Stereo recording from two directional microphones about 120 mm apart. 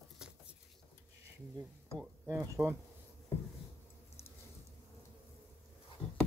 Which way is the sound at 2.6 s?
10° right (ahead or behind).